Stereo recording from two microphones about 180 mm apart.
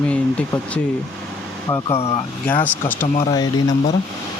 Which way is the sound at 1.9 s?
35° left (ahead or behind).